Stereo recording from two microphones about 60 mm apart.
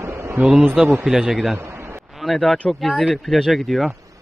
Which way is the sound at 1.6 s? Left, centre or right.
Right.